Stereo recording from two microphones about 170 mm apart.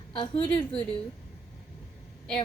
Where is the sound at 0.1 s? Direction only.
25° left (ahead or behind).